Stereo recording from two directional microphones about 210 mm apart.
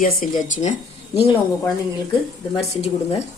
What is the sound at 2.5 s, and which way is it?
Speech, 30° left (ahead or behind).